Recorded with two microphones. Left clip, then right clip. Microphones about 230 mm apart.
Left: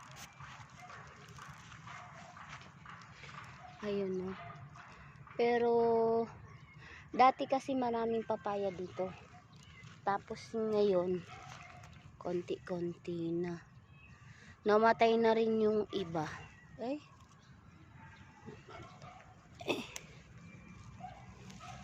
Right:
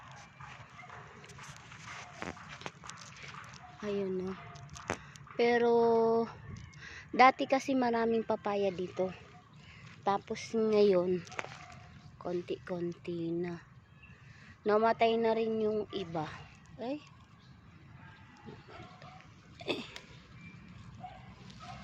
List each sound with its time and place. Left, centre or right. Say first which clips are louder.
3.8 s speech: right 2 dB; centre
5.4 s speech: right 3 dB; centre
12.2 s speech: right 1 dB; centre
14.6 s speech: even; centre
19.5 s a sound: even; centre